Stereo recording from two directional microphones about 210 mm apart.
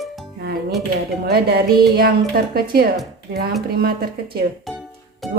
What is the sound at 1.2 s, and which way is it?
A woman's voice, 50° right (ahead or behind).